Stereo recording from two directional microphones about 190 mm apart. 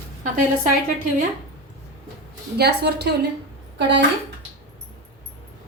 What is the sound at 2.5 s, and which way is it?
Speech, 60° right (ahead or behind).